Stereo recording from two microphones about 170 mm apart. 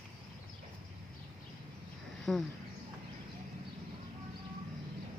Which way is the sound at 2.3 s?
Centre (ahead or behind).